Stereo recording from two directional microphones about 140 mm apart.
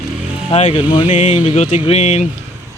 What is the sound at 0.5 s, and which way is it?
Speech, 45° left (ahead or behind).